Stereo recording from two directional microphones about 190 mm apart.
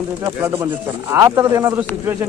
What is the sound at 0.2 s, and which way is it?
Speech, 15° right (ahead or behind).